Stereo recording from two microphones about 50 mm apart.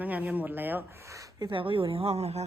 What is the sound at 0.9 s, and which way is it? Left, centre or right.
Speech, right.